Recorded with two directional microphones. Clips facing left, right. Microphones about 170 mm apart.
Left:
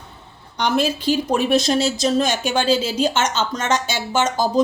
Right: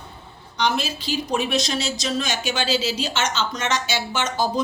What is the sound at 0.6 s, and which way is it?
Speech, 55° left (ahead or behind).